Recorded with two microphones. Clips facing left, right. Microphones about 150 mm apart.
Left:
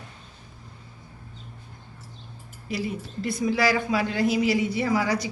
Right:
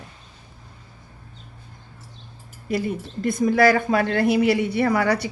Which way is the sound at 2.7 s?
50° right (ahead or behind).